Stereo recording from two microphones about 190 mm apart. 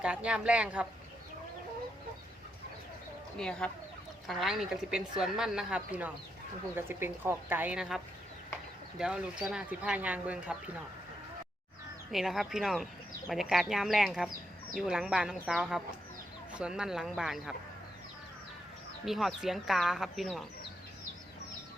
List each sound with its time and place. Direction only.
0.0 s speech: 5° right (ahead or behind)
3.3 s speech: 5° left (ahead or behind)
12.1 s speech: centre (ahead or behind)
19.0 s speech: centre (ahead or behind)